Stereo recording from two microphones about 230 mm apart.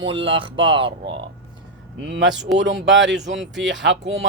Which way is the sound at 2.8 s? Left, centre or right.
Right.